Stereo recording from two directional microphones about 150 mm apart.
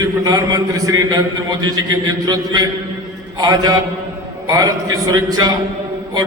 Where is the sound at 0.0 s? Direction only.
25° right (ahead or behind).